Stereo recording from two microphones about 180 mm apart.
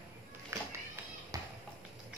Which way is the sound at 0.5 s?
15° right (ahead or behind).